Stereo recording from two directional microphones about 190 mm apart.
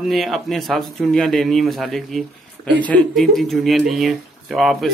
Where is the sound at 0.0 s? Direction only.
Centre (ahead or behind).